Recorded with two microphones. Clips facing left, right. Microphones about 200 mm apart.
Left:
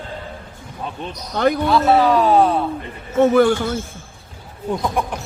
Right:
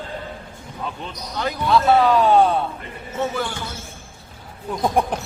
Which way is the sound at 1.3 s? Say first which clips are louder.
Left 9 dB; 60° left (ahead or behind).